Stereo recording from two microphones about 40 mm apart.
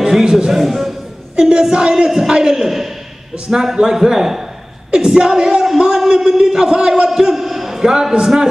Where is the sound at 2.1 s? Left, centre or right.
Centre.